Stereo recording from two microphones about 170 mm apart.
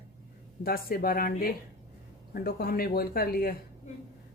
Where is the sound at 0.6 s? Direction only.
60° left (ahead or behind).